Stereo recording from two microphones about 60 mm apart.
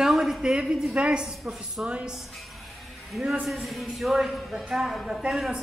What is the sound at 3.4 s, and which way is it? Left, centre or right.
A woman's voice, centre.